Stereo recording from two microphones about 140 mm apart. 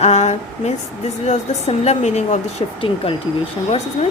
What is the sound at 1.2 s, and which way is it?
Speech, 50° left (ahead or behind).